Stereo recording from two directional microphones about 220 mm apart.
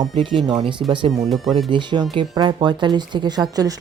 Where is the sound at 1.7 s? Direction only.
20° right (ahead or behind).